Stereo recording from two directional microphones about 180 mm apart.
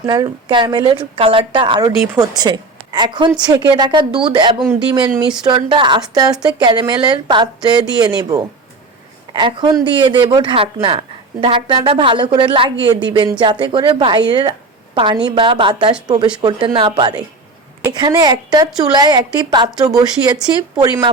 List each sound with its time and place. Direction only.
0.0 s a man's voice: 25° right (ahead or behind)